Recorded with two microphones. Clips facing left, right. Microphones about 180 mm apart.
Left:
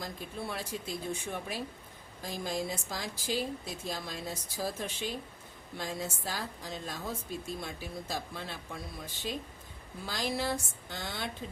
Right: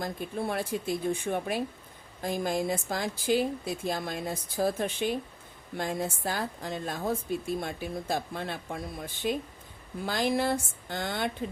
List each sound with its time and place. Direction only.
0.0 s a woman's voice: 55° right (ahead or behind)